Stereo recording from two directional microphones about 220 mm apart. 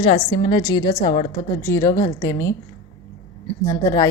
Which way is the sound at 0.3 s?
20° left (ahead or behind).